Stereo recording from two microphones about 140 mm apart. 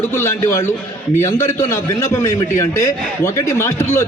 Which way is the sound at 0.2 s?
20° left (ahead or behind).